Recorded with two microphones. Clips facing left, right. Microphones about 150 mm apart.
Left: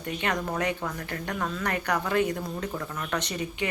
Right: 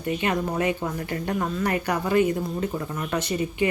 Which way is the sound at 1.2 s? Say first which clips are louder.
Right 4 dB; 20° right (ahead or behind).